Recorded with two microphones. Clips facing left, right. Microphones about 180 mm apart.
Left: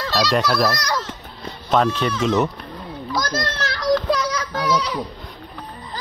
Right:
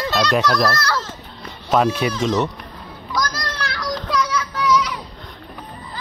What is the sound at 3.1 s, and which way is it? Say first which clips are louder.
Children playing: left 1 dB; 25° left (ahead or behind).